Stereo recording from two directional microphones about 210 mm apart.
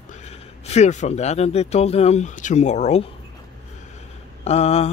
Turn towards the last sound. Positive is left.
turn(degrees=30)  # may be behind; listen again after turning